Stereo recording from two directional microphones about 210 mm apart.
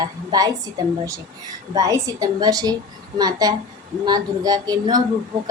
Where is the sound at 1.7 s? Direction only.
15° right (ahead or behind).